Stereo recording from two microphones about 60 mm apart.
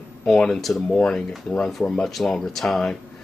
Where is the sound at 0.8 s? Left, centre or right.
Centre.